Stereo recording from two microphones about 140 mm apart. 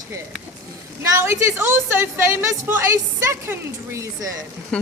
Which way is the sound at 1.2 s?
20° right (ahead or behind).